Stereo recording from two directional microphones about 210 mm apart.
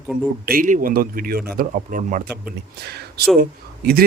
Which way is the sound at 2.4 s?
50° right (ahead or behind).